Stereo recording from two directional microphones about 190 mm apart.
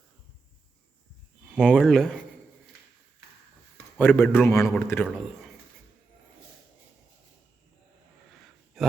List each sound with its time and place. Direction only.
1.5 s a man's voice: 5° left (ahead or behind)
3.9 s a man's voice: 10° left (ahead or behind)
8.8 s a sound: centre (ahead or behind)